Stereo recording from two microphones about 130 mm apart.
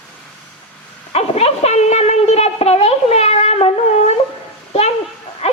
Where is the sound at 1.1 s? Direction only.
50° left (ahead or behind).